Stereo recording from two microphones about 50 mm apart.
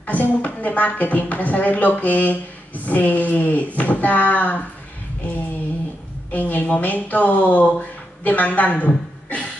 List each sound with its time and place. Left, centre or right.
0.0 s a woman's voice: left
6.3 s a woman's voice: left